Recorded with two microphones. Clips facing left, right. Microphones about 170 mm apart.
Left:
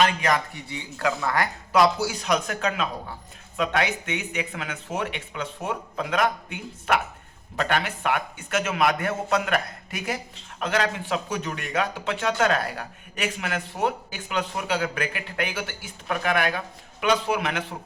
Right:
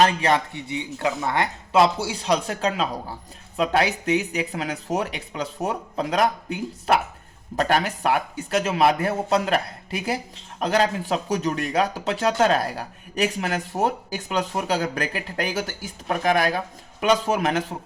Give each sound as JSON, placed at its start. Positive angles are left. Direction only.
{"t": 0.0, "sound": "a woman's voice", "side_deg": -30}